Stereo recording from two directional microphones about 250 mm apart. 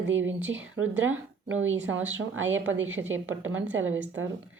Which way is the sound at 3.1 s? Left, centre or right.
Right.